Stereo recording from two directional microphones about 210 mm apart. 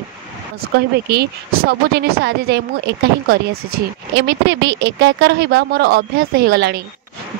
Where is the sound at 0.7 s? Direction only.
50° right (ahead or behind).